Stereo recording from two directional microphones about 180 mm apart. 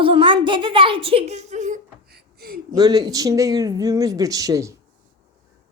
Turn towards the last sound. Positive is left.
turn(degrees=-20)  # may be behind; listen again after turning